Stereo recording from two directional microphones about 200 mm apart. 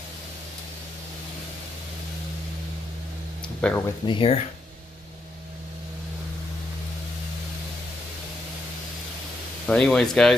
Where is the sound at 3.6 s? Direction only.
5° left (ahead or behind).